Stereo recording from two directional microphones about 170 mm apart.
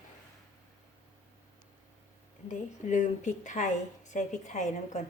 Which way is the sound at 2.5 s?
45° left (ahead or behind).